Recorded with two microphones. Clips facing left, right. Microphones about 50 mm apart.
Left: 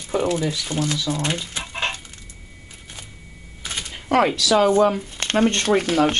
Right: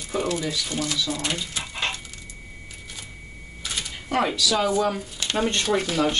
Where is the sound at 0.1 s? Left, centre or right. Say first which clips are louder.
Left 4 dB; left.